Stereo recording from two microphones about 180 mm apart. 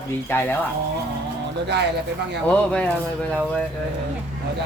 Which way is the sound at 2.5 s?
5° left (ahead or behind).